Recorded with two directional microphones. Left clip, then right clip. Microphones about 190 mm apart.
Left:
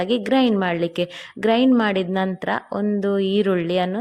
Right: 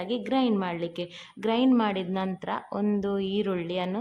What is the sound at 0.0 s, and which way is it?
A woman's voice, 25° left (ahead or behind).